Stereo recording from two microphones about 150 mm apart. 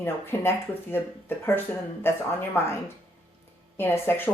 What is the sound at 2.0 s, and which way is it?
Speech, 15° left (ahead or behind).